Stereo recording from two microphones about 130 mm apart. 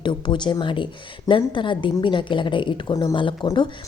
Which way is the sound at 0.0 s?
40° left (ahead or behind).